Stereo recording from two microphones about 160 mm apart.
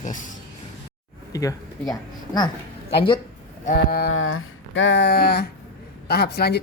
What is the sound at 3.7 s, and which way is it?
Speech, 75° left (ahead or behind).